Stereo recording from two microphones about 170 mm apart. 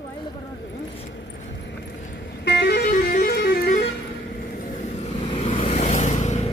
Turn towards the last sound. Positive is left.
turn(degrees=40)  # may be behind; listen again after turning